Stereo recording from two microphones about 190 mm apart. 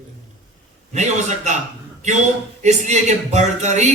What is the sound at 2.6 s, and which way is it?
A man's voice, 35° right (ahead or behind).